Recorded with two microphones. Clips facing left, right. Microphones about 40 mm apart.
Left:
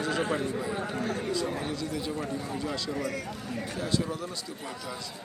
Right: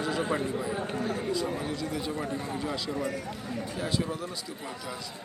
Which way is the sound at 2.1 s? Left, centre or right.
Right.